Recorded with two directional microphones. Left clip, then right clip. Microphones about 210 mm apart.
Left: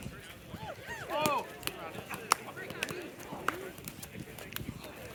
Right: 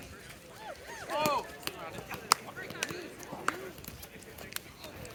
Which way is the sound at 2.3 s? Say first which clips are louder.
Right 2 dB; 45° right (ahead or behind).